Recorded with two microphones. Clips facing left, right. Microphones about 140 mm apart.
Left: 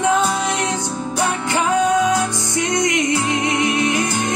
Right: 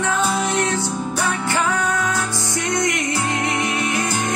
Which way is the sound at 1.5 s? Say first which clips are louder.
Left 7 dB; 20° left (ahead or behind).